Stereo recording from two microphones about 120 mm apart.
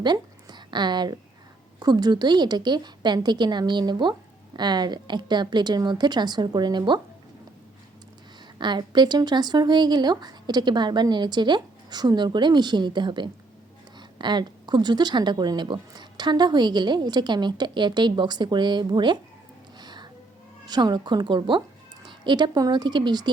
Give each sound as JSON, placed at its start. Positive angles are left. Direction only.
{"t": 0.0, "sound": "a woman's voice", "side_deg": -35}
{"t": 8.5, "sound": "speech", "side_deg": -40}
{"t": 19.8, "sound": "music", "side_deg": -35}
{"t": 20.7, "sound": "speech", "side_deg": -35}